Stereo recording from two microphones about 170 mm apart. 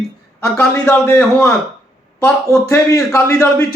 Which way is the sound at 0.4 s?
5° left (ahead or behind).